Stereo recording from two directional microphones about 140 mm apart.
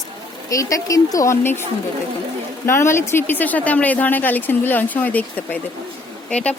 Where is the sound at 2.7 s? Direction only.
20° left (ahead or behind).